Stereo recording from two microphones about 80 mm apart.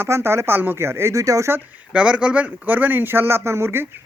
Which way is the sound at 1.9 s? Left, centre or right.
Centre.